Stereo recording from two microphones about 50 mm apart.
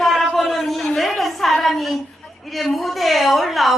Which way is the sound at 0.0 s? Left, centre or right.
Centre.